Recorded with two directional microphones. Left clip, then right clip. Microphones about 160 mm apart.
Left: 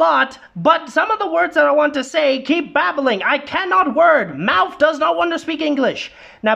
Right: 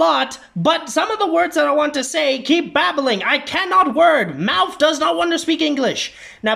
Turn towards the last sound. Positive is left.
turn(degrees=5)  # may be behind; listen again after turning